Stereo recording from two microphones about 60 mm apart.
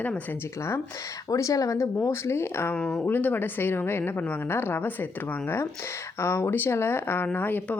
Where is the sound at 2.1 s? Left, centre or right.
Left.